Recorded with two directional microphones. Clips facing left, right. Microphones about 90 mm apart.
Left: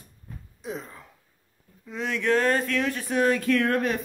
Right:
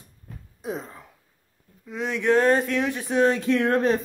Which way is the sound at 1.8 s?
15° right (ahead or behind).